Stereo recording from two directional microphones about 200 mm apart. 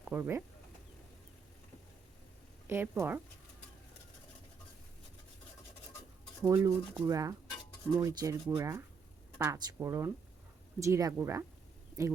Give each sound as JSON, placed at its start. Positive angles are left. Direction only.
{"t": 0.0, "sound": "speech", "side_deg": -10}
{"t": 2.6, "sound": "speech", "side_deg": -10}
{"t": 6.4, "sound": "speech", "side_deg": -15}